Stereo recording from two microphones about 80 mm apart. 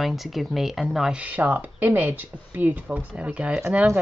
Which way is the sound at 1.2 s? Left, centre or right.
Centre.